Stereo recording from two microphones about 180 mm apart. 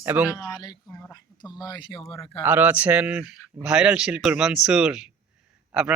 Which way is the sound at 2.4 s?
10° right (ahead or behind).